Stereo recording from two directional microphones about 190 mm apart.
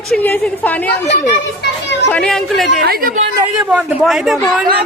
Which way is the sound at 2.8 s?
50° right (ahead or behind).